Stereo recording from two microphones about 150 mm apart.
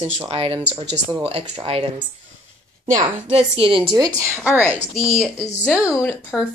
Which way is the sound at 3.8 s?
25° right (ahead or behind).